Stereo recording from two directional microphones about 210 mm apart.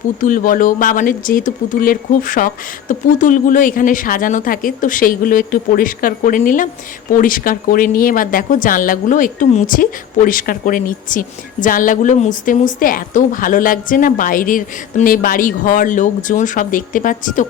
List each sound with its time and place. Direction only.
0.2 s speech: 40° left (ahead or behind)